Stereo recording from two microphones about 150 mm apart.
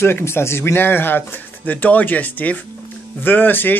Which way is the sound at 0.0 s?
15° left (ahead or behind).